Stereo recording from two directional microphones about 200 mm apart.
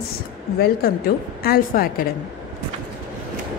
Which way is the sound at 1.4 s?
50° left (ahead or behind).